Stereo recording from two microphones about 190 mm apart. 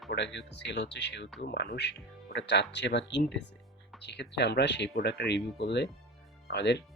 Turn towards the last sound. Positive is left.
turn(degrees=65)  # may be behind; listen again after turning